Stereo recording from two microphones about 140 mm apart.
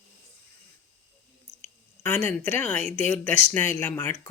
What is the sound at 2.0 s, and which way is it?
Speech, 15° left (ahead or behind).